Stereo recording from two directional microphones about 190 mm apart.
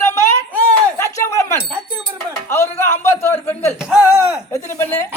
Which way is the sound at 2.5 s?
15° left (ahead or behind).